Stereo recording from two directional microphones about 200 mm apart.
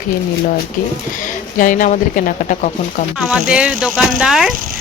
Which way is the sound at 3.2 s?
5° right (ahead or behind).